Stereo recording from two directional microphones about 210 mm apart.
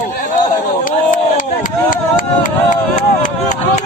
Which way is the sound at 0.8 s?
40° left (ahead or behind).